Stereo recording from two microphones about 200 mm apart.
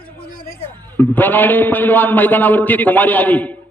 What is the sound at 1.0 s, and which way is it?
A man's voice, 10° left (ahead or behind).